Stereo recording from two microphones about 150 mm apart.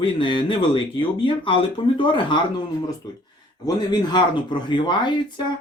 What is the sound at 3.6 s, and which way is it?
Speech, 30° left (ahead or behind).